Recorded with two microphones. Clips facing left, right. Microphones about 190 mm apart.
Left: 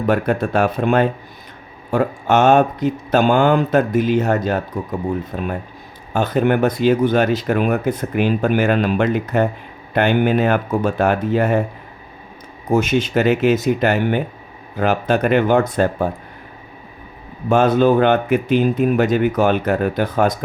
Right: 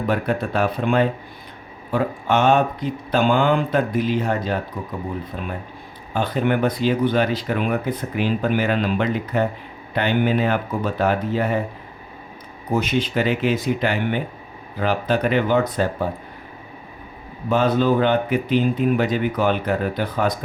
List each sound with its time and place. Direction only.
0.1 s speech: 45° left (ahead or behind)
12.7 s speech: 45° left (ahead or behind)
17.5 s speech: 50° left (ahead or behind)